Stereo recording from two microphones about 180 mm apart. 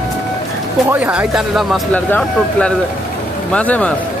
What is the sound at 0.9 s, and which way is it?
Speech, 10° right (ahead or behind).